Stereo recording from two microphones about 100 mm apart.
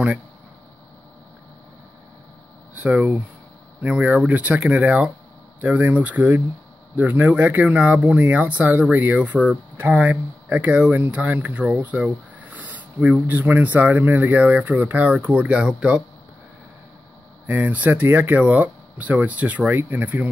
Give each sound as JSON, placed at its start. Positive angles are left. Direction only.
{"t": 2.7, "sound": "speech", "side_deg": -15}
{"t": 17.5, "sound": "speech", "side_deg": -15}